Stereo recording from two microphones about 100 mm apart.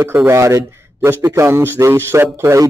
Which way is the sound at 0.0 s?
25° right (ahead or behind).